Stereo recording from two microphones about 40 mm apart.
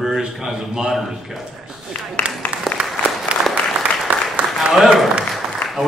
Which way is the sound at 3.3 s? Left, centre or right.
Right.